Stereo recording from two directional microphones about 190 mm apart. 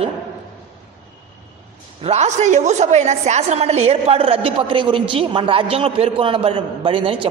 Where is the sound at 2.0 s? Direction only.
35° right (ahead or behind).